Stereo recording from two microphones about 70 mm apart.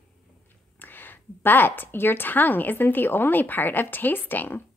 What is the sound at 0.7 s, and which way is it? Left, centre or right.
Speech, left.